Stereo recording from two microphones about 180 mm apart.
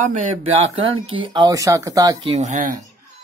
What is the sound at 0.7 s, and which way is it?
Speech, 30° right (ahead or behind).